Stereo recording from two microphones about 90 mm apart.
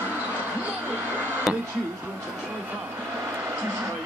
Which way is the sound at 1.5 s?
Centre (ahead or behind).